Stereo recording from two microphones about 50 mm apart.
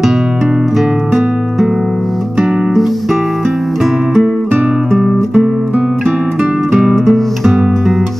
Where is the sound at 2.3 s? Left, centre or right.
Centre.